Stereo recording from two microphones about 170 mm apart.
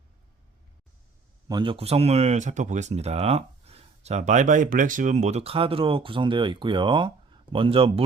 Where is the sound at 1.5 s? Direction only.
25° right (ahead or behind).